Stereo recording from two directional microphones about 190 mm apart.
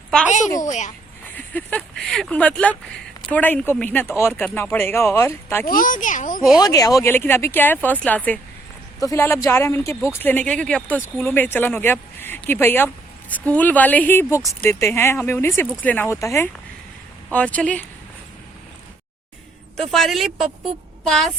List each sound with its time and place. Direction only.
0.6 s speech: 40° left (ahead or behind)
1.4 s speech: 10° left (ahead or behind)
5.6 s speech: 45° left (ahead or behind)
6.6 s speech: 20° left (ahead or behind)
19.9 s a woman's voice: centre (ahead or behind)